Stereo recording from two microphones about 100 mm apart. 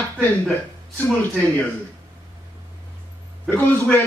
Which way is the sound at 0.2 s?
15° left (ahead or behind).